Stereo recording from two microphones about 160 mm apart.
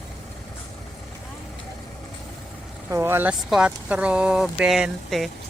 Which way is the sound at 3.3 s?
Centre (ahead or behind).